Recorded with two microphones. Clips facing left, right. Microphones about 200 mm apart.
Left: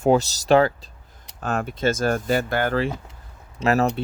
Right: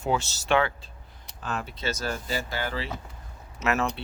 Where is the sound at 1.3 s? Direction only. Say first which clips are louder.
Left 8 dB; 50° left (ahead or behind).